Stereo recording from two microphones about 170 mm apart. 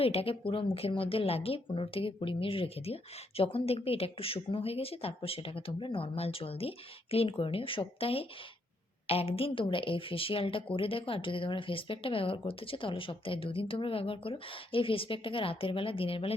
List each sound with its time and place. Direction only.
0.0 s speech: 35° left (ahead or behind)